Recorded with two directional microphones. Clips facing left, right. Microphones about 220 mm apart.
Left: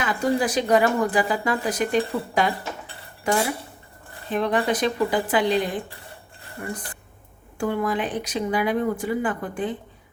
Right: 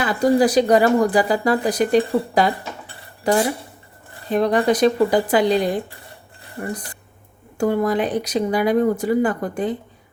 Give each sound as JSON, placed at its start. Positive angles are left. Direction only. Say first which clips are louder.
{"t": 0.0, "sound": "speech", "louder": "right 6 dB", "side_deg": -35}
{"t": 7.6, "sound": "speech", "louder": "right 5 dB", "side_deg": -40}